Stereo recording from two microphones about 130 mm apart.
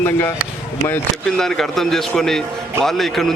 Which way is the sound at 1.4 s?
5° left (ahead or behind).